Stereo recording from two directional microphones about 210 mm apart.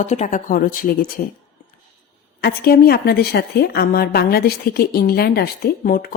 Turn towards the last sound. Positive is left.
turn(degrees=45)  # may be behind; listen again after turning